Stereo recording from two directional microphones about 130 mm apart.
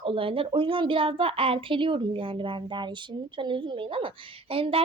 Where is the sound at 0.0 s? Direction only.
45° right (ahead or behind).